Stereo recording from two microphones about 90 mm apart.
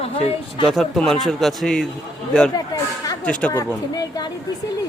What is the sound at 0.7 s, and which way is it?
A man's voice, 5° left (ahead or behind).